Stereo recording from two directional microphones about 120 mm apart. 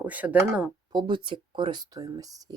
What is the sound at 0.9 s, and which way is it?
Speech, 40° right (ahead or behind).